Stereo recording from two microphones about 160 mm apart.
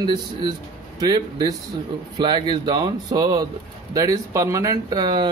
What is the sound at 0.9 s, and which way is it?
Speech, 25° right (ahead or behind).